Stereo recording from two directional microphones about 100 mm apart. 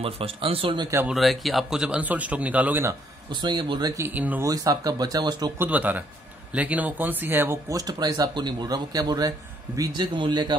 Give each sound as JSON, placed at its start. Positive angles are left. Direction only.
{"t": 0.0, "sound": "speech", "side_deg": -70}
{"t": 1.0, "sound": "a man's voice", "side_deg": 0}
{"t": 3.3, "sound": "speech", "side_deg": -45}
{"t": 3.9, "sound": "a man's voice", "side_deg": -20}
{"t": 4.4, "sound": "speech", "side_deg": -35}
{"t": 5.6, "sound": "a man's voice", "side_deg": -15}
{"t": 7.7, "sound": "speech", "side_deg": -40}